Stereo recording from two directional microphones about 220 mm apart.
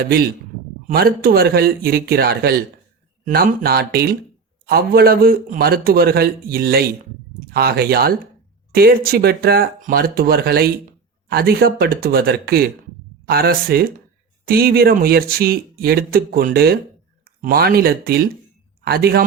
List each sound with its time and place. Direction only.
0.9 s speech: 40° right (ahead or behind)